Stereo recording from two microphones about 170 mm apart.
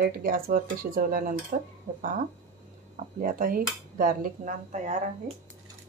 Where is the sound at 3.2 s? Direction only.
55° right (ahead or behind).